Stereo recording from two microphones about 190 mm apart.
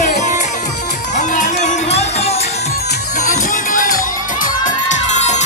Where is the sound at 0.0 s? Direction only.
40° left (ahead or behind).